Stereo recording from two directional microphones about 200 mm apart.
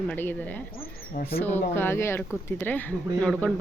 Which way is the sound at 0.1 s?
10° left (ahead or behind).